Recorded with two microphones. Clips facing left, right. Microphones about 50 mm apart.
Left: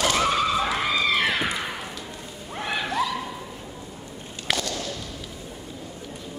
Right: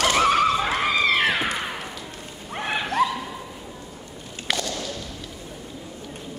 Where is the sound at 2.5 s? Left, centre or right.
Right.